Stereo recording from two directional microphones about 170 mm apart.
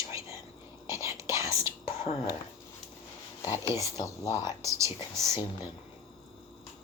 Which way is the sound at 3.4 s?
20° left (ahead or behind).